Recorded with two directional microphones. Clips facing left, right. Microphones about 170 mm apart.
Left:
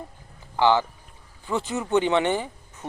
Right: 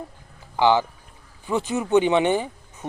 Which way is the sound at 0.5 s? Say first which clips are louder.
Right 1 dB; 15° right (ahead or behind).